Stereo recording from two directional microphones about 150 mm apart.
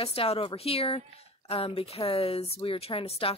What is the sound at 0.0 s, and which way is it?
Speech, 40° left (ahead or behind).